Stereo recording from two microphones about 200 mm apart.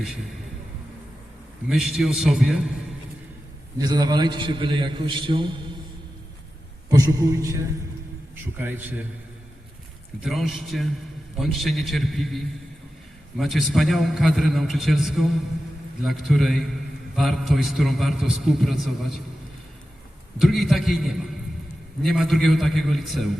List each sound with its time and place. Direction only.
1.7 s a man's voice: centre (ahead or behind)
3.8 s a man's voice: 20° right (ahead or behind)
6.9 s a man's voice: 15° right (ahead or behind)
8.5 s a man's voice: 10° right (ahead or behind)
10.2 s a man's voice: centre (ahead or behind)
20.4 s a man's voice: centre (ahead or behind)